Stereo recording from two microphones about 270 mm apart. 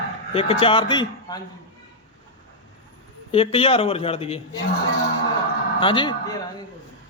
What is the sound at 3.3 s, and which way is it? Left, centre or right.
A man's voice, left.